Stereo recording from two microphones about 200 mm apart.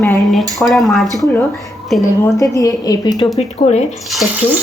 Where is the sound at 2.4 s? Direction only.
15° left (ahead or behind).